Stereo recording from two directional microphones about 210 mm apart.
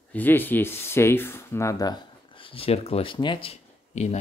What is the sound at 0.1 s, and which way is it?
Speech, 10° left (ahead or behind).